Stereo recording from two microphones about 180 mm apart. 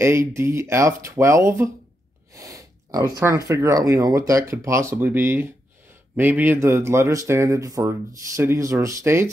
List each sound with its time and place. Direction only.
0.0 s speech: 15° right (ahead or behind)